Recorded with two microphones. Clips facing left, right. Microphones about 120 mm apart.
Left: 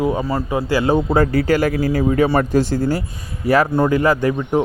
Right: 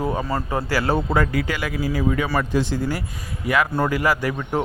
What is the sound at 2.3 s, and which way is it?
Speech, 45° left (ahead or behind).